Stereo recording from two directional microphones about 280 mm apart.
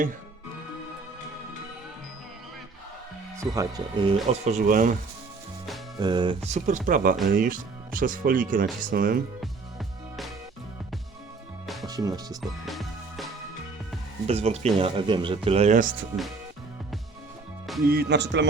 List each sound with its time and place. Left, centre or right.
3.3 s speech: centre; by 4.9 s right
6.0 s speech: centre; by 9.2 s right
9.4 s music: centre
11.6 s music: centre
11.9 s speech: centre
12.4 s music: centre
14.3 s speech: right
17.8 s speech: right